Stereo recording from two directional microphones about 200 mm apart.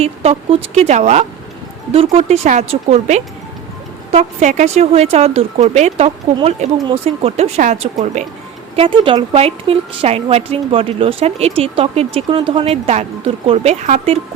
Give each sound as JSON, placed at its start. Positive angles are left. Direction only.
{"t": 0.0, "sound": "a woman's voice", "side_deg": -30}